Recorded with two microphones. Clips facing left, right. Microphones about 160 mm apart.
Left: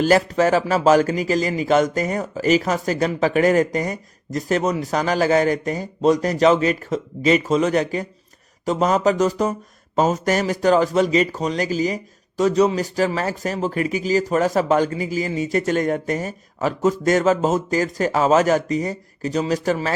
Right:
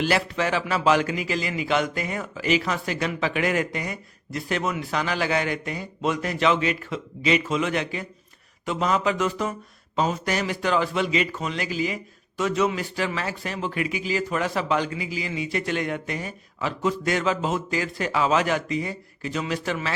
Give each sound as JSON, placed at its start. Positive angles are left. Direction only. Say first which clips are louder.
{"t": 0.0, "sound": "a man's voice", "louder": "left 7 dB", "side_deg": 40}